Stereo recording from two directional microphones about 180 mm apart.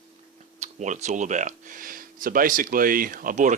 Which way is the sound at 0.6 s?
40° right (ahead or behind).